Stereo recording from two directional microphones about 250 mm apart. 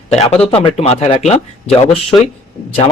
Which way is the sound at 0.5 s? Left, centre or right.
Left.